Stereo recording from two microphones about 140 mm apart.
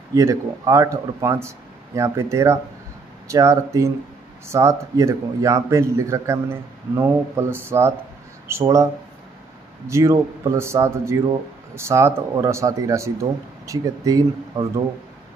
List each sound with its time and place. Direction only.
0.1 s a man's voice: 25° right (ahead or behind)
9.8 s a man's voice: 20° right (ahead or behind)